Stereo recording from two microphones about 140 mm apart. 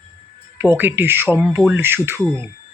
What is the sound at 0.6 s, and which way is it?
Speech, 15° right (ahead or behind).